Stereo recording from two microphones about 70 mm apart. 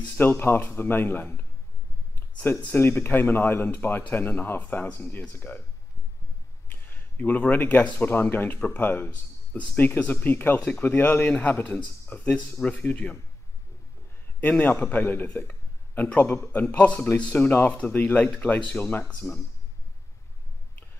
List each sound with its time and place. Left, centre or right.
0.0 s speech: left
2.7 s speech: left
6.7 s speech: left
14.4 s speech: left
15.3 s a sound: left
16.6 s a man's voice: centre